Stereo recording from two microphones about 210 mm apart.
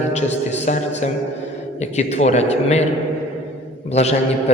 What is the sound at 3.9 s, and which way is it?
Speech, 30° left (ahead or behind).